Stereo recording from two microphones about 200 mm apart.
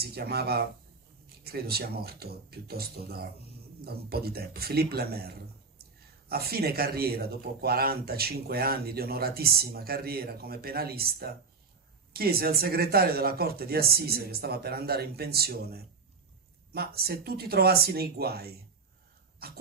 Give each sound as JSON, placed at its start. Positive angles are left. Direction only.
{"t": 0.0, "sound": "speech", "side_deg": -50}